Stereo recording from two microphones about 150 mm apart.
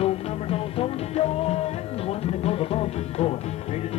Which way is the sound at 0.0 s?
40° left (ahead or behind).